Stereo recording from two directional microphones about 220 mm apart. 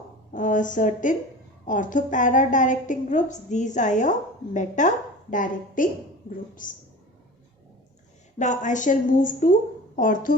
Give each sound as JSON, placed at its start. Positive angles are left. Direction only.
{"t": 0.3, "sound": "a woman's voice", "side_deg": 35}
{"t": 8.4, "sound": "a woman's voice", "side_deg": 35}